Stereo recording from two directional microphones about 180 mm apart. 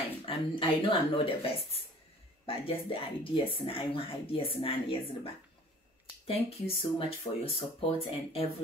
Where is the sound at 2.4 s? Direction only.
30° left (ahead or behind).